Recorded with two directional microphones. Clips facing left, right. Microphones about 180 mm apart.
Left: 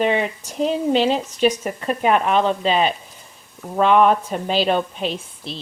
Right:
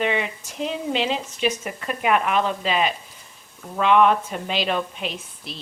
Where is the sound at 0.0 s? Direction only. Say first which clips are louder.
Left 4 dB; 40° left (ahead or behind).